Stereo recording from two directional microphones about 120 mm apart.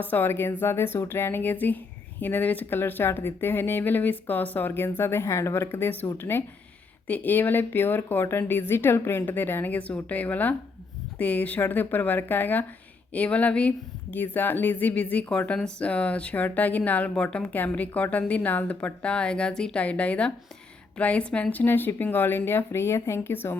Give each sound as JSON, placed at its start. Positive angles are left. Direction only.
{"t": 0.0, "sound": "speech", "side_deg": 15}